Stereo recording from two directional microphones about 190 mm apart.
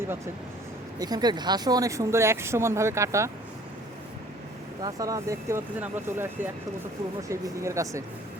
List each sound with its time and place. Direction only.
0.9 s speech: 20° right (ahead or behind)
4.8 s speech: 20° right (ahead or behind)